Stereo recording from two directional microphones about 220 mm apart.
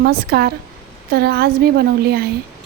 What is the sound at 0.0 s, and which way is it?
A woman's voice, 45° right (ahead or behind).